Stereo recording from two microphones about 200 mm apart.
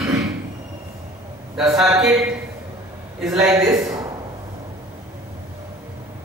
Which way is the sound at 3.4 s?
15° right (ahead or behind).